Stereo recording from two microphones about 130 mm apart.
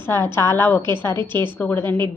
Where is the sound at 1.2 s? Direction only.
35° right (ahead or behind).